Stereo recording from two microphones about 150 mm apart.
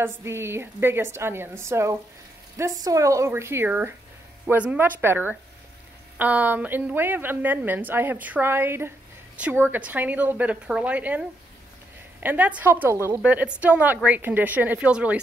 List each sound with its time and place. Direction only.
0.0 s a woman's voice: 15° right (ahead or behind)